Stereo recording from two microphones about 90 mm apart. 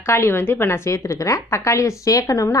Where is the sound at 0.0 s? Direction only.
30° left (ahead or behind).